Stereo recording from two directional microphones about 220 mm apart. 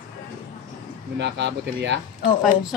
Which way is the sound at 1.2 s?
55° right (ahead or behind).